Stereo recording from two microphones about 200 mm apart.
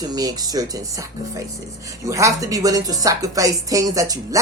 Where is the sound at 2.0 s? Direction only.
15° right (ahead or behind).